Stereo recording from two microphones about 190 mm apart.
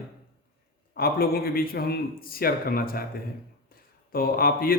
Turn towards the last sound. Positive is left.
turn(degrees=50)  # may be behind; listen again after turning